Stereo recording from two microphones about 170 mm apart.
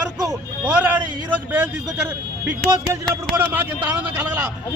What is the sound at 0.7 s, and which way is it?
A man's voice, 10° right (ahead or behind).